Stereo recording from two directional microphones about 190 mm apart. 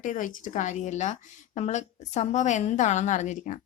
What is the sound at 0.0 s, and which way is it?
A woman's voice, 40° left (ahead or behind).